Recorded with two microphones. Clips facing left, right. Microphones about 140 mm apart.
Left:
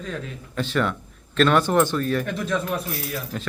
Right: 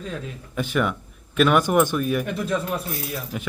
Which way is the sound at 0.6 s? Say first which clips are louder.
Even; 10° right (ahead or behind).